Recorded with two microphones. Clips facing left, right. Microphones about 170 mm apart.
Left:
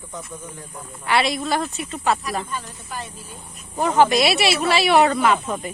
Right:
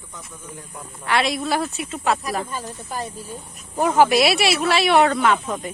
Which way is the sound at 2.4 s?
40° right (ahead or behind).